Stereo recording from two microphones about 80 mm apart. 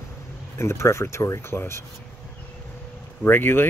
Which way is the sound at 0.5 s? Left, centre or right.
Left.